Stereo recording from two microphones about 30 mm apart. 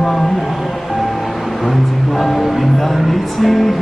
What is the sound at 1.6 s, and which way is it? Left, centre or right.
Music, centre.